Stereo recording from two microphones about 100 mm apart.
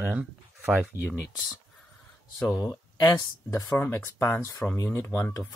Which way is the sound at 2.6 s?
35° left (ahead or behind).